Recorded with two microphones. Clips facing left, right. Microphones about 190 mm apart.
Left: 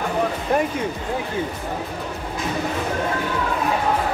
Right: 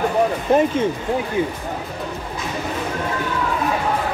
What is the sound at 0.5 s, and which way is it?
Speech, 25° right (ahead or behind).